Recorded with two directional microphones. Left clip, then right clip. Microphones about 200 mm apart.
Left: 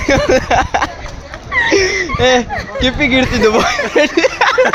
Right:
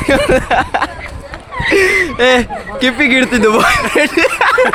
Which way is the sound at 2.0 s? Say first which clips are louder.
Right 1 dB; 25° right (ahead or behind).